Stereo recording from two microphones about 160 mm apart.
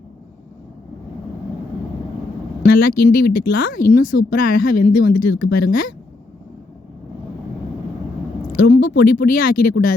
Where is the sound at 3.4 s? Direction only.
60° left (ahead or behind).